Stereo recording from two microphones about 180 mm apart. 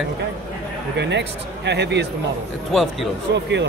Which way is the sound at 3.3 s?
75° right (ahead or behind).